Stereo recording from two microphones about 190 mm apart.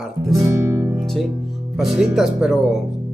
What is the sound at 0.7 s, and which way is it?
Music, 15° right (ahead or behind).